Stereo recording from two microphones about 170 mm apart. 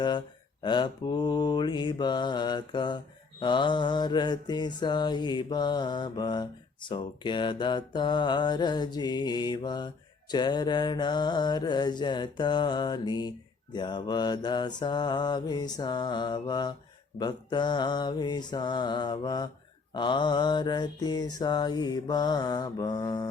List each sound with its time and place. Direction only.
0.6 s mantra: 25° left (ahead or behind)